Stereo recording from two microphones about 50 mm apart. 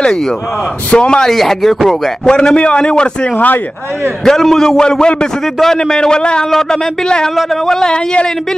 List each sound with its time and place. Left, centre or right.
0.8 s a man's voice: centre
1.3 s a man's voice: centre
4.2 s a man's voice: centre